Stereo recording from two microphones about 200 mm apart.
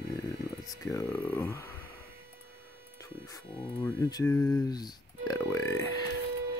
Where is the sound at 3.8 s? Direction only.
15° left (ahead or behind).